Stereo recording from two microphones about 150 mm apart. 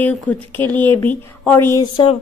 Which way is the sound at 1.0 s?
15° left (ahead or behind).